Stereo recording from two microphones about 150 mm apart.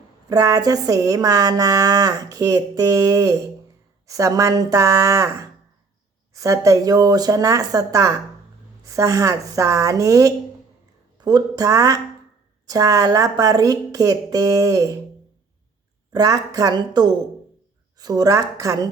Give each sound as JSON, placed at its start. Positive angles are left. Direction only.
{"t": 0.3, "sound": "speech", "side_deg": -25}
{"t": 16.1, "sound": "speech", "side_deg": -25}